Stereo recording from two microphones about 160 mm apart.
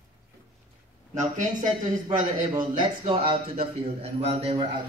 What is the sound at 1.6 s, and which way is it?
A man's voice, 25° right (ahead or behind).